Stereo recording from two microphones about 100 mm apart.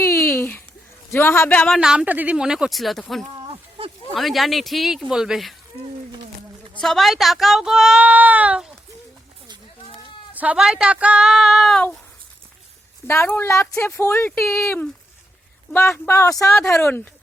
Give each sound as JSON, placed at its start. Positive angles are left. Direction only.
{"t": 0.0, "sound": "a sound", "side_deg": 30}
{"t": 1.1, "sound": "speech", "side_deg": 25}
{"t": 1.8, "sound": "speech", "side_deg": -10}
{"t": 3.4, "sound": "a sound", "side_deg": -70}
{"t": 4.1, "sound": "speech", "side_deg": 0}
{"t": 6.8, "sound": "speech", "side_deg": 0}
{"t": 10.3, "sound": "speech", "side_deg": -15}
{"t": 13.1, "sound": "speech", "side_deg": 20}